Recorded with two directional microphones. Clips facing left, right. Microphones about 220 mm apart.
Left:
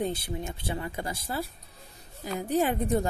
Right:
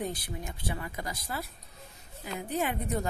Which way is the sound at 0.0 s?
25° left (ahead or behind).